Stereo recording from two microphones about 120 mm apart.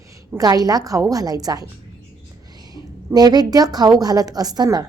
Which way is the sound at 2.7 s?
30° right (ahead or behind).